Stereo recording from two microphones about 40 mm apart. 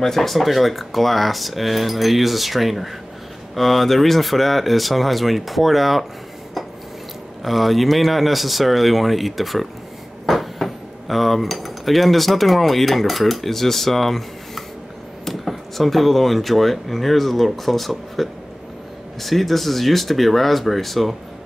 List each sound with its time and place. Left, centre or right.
0.0 s speech: centre
7.4 s speech: centre